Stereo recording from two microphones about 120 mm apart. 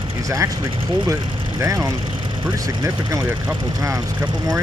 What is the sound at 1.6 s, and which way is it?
Speech, 25° right (ahead or behind).